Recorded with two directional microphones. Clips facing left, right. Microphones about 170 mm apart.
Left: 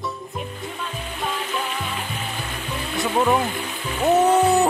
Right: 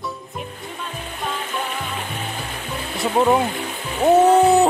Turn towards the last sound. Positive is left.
turn(degrees=-25)  # may be behind; listen again after turning